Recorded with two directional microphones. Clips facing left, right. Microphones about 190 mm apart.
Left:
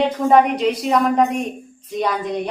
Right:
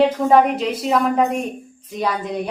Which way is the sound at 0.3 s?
Centre (ahead or behind).